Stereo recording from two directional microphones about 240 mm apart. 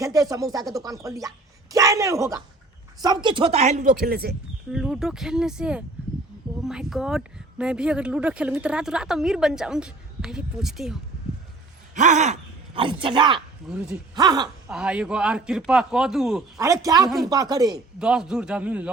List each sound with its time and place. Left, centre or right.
0.0 s a man's voice: centre; by 3.9 s right
4.0 s speech: right
4.7 s speech: centre
11.9 s speech: right
13.7 s speech: centre
14.2 s a man's voice: centre
14.7 s speech: centre
16.6 s a man's voice: centre
18.0 s speech: centre